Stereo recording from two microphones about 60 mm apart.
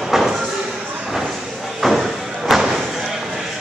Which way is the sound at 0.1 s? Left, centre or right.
Centre.